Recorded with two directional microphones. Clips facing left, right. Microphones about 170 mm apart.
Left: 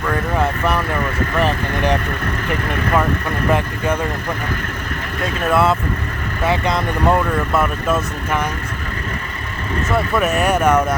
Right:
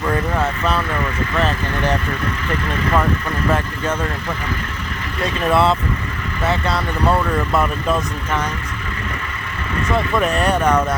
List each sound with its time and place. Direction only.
0.3 s speech: 15° left (ahead or behind)
5.5 s speech: centre (ahead or behind)
6.4 s speech: 15° left (ahead or behind)
7.5 s speech: 5° left (ahead or behind)
9.9 s speech: 5° left (ahead or behind)